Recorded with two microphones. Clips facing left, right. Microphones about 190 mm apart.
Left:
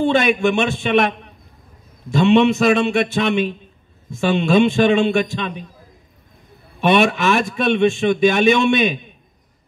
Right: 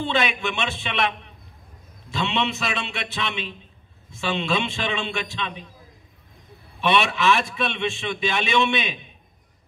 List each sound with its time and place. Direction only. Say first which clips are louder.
0.0 s a man's voice: left 9 dB; 45° left (ahead or behind)
6.8 s a man's voice: left 6 dB; 45° left (ahead or behind)